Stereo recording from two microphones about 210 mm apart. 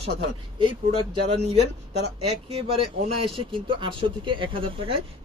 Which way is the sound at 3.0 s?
25° right (ahead or behind).